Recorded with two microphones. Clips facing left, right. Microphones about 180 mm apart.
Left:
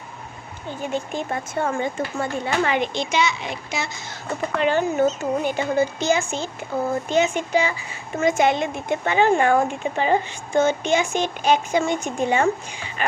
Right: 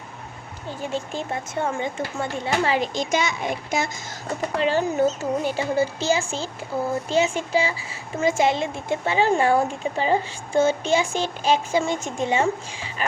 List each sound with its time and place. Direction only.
0.7 s speech: 30° right (ahead or behind); by 4.2 s 50° right (ahead or behind)
4.5 s a woman's voice: 35° right (ahead or behind)